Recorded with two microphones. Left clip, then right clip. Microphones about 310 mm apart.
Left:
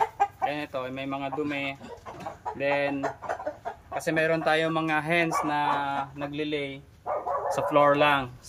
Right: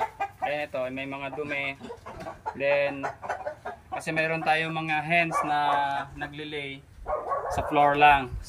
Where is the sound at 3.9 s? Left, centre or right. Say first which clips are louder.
Left 2 dB; centre.